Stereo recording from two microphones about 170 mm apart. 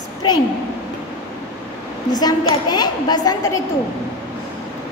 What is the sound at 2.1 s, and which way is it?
A woman's voice, 25° left (ahead or behind).